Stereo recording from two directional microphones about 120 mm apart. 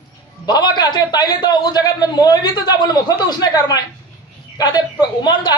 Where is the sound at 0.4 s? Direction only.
35° left (ahead or behind).